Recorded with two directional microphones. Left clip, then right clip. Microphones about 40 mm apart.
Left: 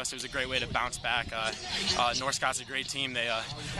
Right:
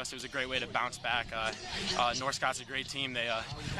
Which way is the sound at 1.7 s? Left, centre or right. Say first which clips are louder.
Left 5 dB; left.